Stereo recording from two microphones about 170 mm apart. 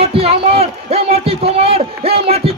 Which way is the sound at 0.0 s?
35° right (ahead or behind).